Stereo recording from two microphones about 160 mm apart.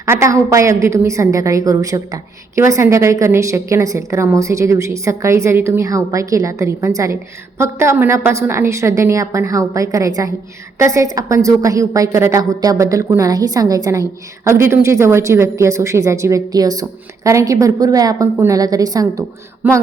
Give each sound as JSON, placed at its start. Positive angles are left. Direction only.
{"t": 0.0, "sound": "a woman's voice", "side_deg": -20}